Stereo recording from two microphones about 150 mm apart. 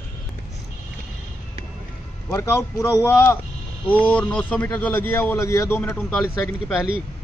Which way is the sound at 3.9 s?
10° left (ahead or behind).